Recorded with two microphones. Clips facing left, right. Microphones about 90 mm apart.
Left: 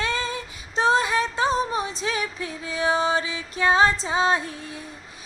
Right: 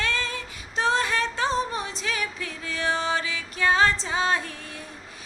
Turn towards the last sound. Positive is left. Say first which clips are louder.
# left 2 dB
turn(degrees=20)  # may be behind; listen again after turning